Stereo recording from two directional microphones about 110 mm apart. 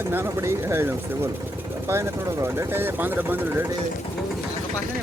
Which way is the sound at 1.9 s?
25° right (ahead or behind).